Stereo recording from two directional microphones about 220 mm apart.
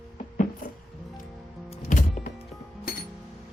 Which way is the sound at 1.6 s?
30° left (ahead or behind).